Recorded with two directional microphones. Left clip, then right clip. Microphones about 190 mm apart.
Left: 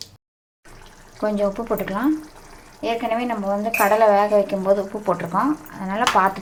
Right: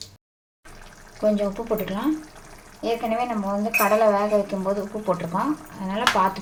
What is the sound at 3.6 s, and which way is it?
Speech, 30° left (ahead or behind).